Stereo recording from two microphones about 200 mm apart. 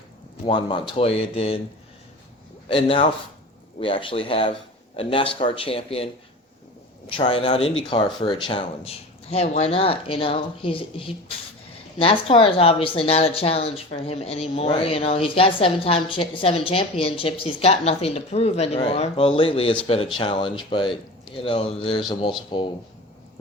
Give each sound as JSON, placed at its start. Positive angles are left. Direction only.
{"t": 0.4, "sound": "a woman's voice", "side_deg": 25}
{"t": 2.6, "sound": "a woman's voice", "side_deg": 25}
{"t": 7.1, "sound": "a woman's voice", "side_deg": 25}